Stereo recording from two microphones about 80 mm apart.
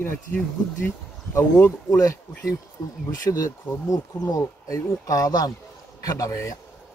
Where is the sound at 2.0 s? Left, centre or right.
Left.